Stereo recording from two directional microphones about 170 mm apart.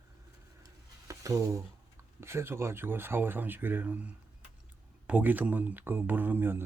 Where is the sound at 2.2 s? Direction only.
15° right (ahead or behind).